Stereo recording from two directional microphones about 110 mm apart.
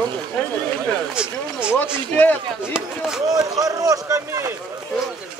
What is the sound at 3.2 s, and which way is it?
Speech, 35° right (ahead or behind).